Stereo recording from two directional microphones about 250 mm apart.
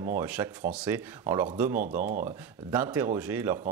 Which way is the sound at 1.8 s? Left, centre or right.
Right.